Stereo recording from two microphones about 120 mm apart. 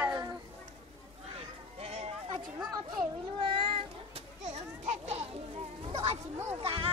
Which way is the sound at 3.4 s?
50° right (ahead or behind).